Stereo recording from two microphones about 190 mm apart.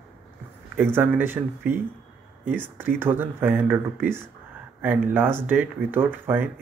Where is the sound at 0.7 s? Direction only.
10° right (ahead or behind).